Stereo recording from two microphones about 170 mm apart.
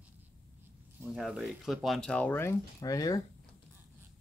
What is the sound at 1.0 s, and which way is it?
Speech, centre (ahead or behind).